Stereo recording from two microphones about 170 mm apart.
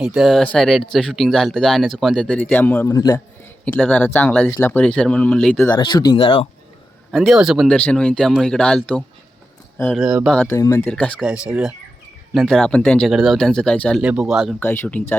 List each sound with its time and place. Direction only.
0.0 s speech: 5° right (ahead or behind); by 3.2 s 20° left (ahead or behind)
3.7 s speech: 5° left (ahead or behind)
5.7 s speech: 25° left (ahead or behind)
7.1 s speech: 5° right (ahead or behind)
10.3 s speech: 15° left (ahead or behind)
14.0 s speech: 5° right (ahead or behind)
14.6 s speech: 15° left (ahead or behind)